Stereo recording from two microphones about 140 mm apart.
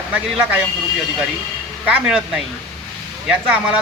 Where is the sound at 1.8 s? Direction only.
5° right (ahead or behind).